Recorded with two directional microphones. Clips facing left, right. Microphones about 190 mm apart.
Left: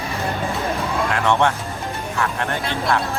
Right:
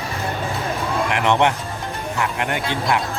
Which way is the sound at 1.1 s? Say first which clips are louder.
Right 1 dB; 20° right (ahead or behind).